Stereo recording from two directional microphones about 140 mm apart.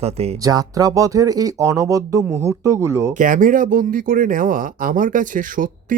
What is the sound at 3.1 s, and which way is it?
Speech, 70° right (ahead or behind).